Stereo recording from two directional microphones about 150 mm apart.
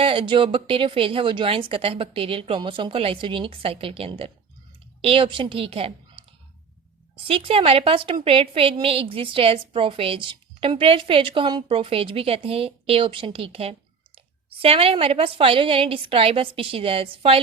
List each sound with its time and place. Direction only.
0.0 s a woman's voice: 35° right (ahead or behind)
7.3 s a woman's voice: 35° right (ahead or behind)